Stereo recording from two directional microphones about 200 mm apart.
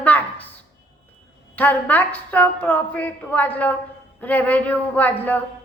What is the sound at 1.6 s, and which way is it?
A woman's voice, 10° left (ahead or behind).